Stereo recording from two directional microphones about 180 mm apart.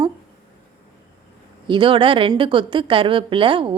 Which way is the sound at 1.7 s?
30° right (ahead or behind).